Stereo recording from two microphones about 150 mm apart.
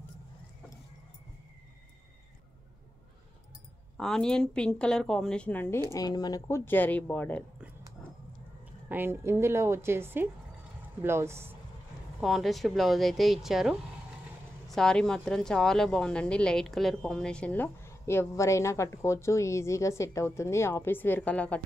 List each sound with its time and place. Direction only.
3.9 s a woman's voice: 5° left (ahead or behind)
5.9 s speech: 25° left (ahead or behind)
8.8 s a woman's voice: 15° right (ahead or behind)
12.2 s a woman's voice: centre (ahead or behind)